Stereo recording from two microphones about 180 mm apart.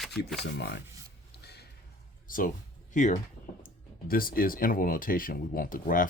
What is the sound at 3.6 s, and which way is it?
Speech, 55° left (ahead or behind).